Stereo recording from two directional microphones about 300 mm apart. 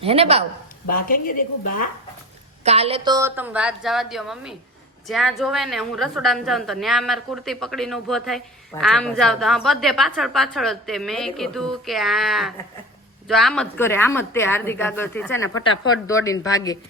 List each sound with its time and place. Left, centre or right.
0.0 s a woman's voice: centre
0.9 s a woman's voice: left
2.6 s a woman's voice: centre